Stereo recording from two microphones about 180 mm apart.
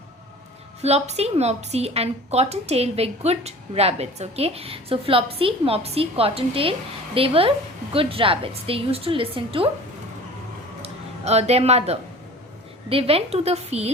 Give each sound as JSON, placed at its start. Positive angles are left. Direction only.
{"t": 0.8, "sound": "a woman's voice", "side_deg": -35}
{"t": 10.8, "sound": "a woman's voice", "side_deg": -35}